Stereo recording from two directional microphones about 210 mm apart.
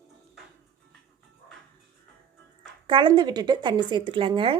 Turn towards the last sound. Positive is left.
turn(degrees=-25)  # may be behind; listen again after turning